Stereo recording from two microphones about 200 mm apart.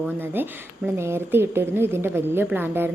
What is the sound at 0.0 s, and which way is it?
A woman's voice, 10° right (ahead or behind).